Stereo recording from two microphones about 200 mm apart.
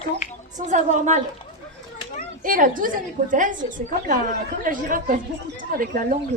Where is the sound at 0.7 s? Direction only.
35° right (ahead or behind).